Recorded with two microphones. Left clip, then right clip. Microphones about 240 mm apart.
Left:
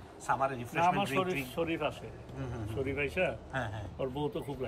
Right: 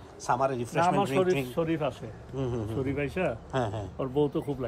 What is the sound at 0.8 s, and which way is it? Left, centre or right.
A man's voice, right.